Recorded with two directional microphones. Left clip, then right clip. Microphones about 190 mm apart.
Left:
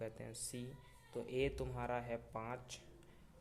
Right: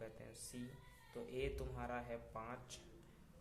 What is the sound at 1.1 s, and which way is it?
Speech, 40° left (ahead or behind).